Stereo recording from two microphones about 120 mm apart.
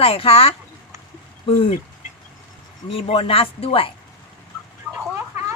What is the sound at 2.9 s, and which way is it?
A woman's voice, 50° left (ahead or behind).